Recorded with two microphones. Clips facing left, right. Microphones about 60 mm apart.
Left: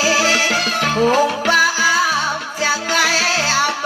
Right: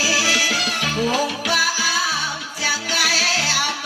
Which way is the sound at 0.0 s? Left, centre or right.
Left.